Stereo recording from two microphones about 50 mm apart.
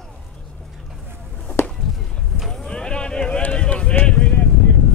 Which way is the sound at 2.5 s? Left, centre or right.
Centre.